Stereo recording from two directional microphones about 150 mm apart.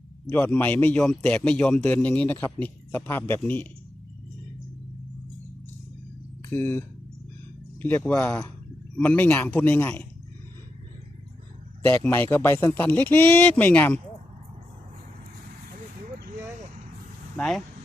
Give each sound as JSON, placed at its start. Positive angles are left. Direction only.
{"t": 0.3, "sound": "a man's voice", "side_deg": 15}
{"t": 6.5, "sound": "a man's voice", "side_deg": 15}
{"t": 11.9, "sound": "a man's voice", "side_deg": 15}
{"t": 17.3, "sound": "speech", "side_deg": 5}